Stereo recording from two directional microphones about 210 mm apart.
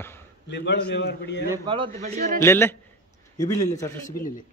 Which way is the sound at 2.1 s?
40° right (ahead or behind).